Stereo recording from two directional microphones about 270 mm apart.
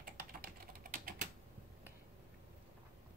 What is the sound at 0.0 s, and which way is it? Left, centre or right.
Typing, right.